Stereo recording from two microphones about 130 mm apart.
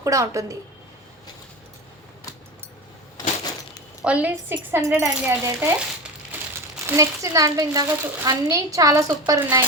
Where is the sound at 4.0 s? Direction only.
10° right (ahead or behind).